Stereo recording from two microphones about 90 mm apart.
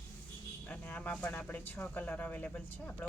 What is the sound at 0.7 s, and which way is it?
Speech, 15° left (ahead or behind).